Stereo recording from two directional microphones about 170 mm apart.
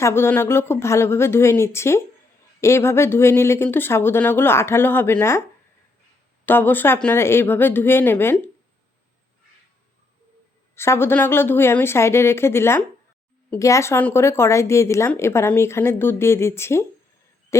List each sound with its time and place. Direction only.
0.0 s speech: 15° left (ahead or behind)
6.4 s speech: 10° left (ahead or behind)
10.8 s speech: 15° left (ahead or behind)
17.5 s hoot: 15° left (ahead or behind)